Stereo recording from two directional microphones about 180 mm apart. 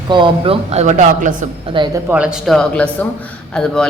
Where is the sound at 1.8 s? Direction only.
25° right (ahead or behind).